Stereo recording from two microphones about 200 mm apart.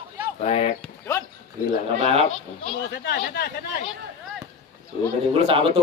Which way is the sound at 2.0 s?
30° right (ahead or behind).